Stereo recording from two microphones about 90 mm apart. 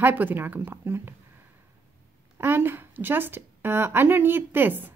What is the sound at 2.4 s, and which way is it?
Speech, 25° right (ahead or behind).